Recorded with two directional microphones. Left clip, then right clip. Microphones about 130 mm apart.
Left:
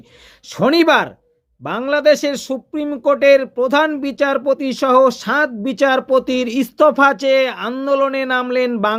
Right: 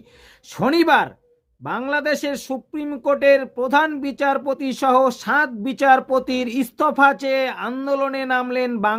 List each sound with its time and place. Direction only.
0.4 s speech: 25° left (ahead or behind)